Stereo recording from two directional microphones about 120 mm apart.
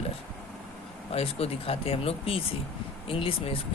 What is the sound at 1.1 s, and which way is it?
Speech, 55° left (ahead or behind).